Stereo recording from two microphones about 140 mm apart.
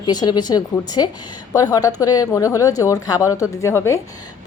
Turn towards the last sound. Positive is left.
turn(degrees=20)  # may be behind; listen again after turning